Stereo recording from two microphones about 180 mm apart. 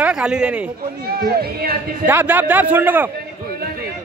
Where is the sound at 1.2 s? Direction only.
60° right (ahead or behind).